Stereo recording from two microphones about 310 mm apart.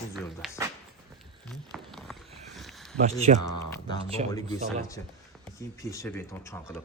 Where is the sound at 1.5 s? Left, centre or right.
Centre.